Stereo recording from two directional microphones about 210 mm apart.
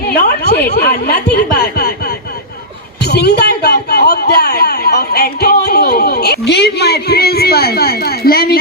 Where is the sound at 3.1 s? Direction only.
50° left (ahead or behind).